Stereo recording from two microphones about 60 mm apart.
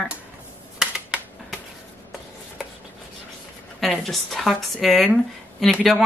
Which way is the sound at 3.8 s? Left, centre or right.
Centre.